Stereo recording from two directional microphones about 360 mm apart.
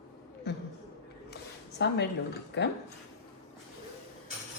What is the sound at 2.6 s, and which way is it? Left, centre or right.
Speech, left.